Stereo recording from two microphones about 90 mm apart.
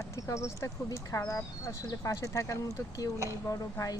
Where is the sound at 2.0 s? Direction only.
35° left (ahead or behind).